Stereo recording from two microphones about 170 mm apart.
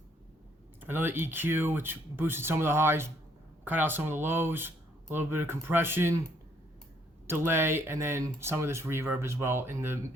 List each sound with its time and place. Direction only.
0.8 s speech: 10° right (ahead or behind)
7.3 s speech: 15° right (ahead or behind)